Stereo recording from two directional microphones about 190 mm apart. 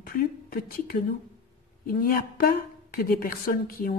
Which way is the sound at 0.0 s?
50° left (ahead or behind).